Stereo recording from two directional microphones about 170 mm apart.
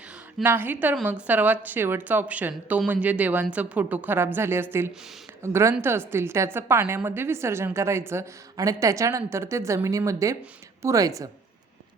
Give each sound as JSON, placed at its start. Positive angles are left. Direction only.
{"t": 0.4, "sound": "a woman's voice", "side_deg": -10}